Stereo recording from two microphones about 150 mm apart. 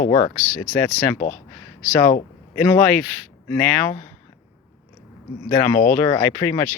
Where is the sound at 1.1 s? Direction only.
60° left (ahead or behind).